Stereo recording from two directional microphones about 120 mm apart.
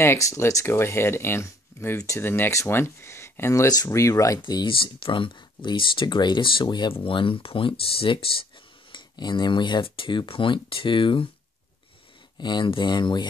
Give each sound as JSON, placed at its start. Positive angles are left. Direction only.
{"t": 0.0, "sound": "speech", "side_deg": 25}
{"t": 4.4, "sound": "speech", "side_deg": 40}
{"t": 12.4, "sound": "speech", "side_deg": 40}